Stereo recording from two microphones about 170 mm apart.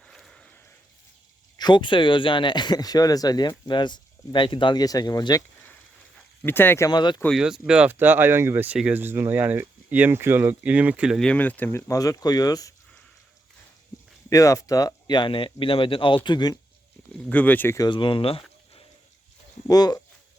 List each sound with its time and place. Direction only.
0.0 s a sound: centre (ahead or behind)
1.5 s speech: 25° left (ahead or behind)
6.4 s speech: 10° left (ahead or behind)
7.3 s speech: 5° right (ahead or behind); by 12.7 s 20° left (ahead or behind)
14.3 s speech: 20° left (ahead or behind)
17.2 s speech: 10° left (ahead or behind)
17.8 s speech: 30° left (ahead or behind)
19.6 s speech: 20° left (ahead or behind)